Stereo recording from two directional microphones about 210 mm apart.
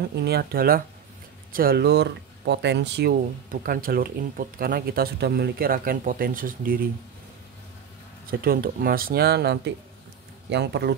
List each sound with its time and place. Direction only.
0.2 s speech: 50° right (ahead or behind)
8.3 s speech: 45° right (ahead or behind)